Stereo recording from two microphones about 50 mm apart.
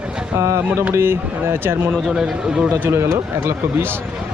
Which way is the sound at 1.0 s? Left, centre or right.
Right.